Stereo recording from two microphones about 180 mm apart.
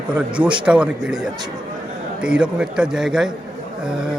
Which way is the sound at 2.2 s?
5° right (ahead or behind).